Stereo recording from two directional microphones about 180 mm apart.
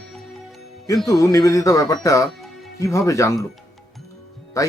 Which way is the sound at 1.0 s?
20° left (ahead or behind).